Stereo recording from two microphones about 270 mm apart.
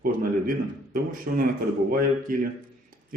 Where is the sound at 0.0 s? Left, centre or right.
Right.